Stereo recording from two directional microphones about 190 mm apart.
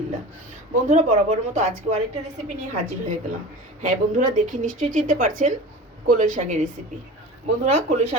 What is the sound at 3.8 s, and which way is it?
Speech, 40° right (ahead or behind).